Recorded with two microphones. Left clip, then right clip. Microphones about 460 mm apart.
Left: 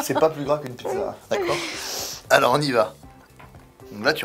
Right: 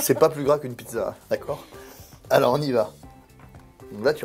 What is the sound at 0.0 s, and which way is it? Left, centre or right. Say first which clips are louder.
Speech: right 1 dB; right.